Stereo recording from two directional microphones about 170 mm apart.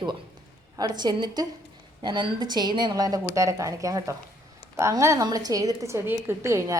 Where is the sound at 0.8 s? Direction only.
25° right (ahead or behind).